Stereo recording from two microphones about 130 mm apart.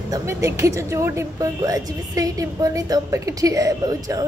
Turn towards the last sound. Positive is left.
turn(degrees=-30)  # may be behind; listen again after turning